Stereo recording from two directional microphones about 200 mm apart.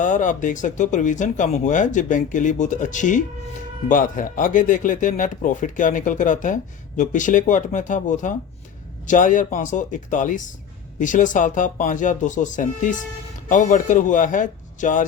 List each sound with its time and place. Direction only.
0.0 s speech: 40° left (ahead or behind)